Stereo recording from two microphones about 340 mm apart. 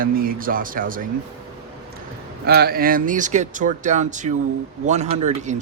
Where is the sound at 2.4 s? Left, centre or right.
Right.